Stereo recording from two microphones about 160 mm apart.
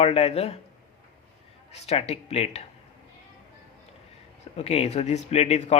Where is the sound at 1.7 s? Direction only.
40° left (ahead or behind).